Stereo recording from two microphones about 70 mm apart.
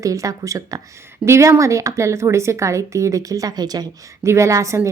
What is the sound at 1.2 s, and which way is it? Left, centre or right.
A woman's voice, right.